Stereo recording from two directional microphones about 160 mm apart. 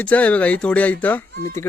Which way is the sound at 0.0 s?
10° left (ahead or behind).